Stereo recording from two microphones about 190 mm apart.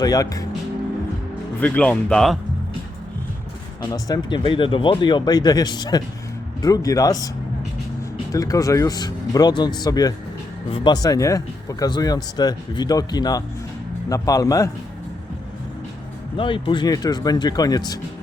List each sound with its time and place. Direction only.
0.0 s speech: 20° left (ahead or behind)
1.6 s speech: 10° left (ahead or behind)
3.8 s speech: 20° left (ahead or behind)
8.3 s a man's voice: 20° left (ahead or behind)
16.4 s speech: 25° left (ahead or behind)